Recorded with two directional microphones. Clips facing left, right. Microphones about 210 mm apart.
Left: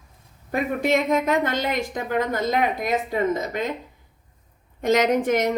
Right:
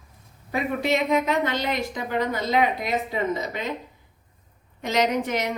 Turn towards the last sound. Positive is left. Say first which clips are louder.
# left 4 dB
turn(degrees=50)  # may be behind; listen again after turning